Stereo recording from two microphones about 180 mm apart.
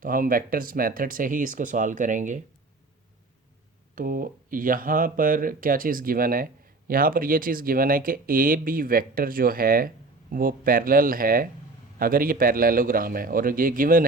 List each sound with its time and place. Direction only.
0.0 s speech: 50° right (ahead or behind)
3.9 s speech: 50° right (ahead or behind)